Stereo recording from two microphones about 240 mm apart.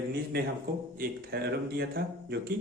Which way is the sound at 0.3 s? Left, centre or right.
Right.